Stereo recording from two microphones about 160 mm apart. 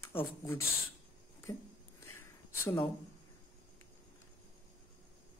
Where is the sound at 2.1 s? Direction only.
15° left (ahead or behind).